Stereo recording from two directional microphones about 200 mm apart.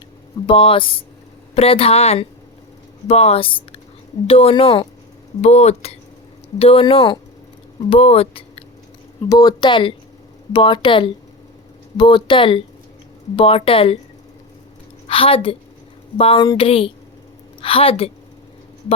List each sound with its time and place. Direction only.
0.4 s a woman's voice: 25° left (ahead or behind)
15.0 s a woman's voice: 25° left (ahead or behind)